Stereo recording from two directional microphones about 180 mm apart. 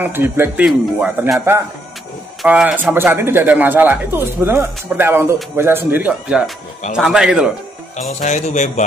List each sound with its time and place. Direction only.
0.0 s speech: 10° right (ahead or behind)
8.1 s speech: 40° left (ahead or behind)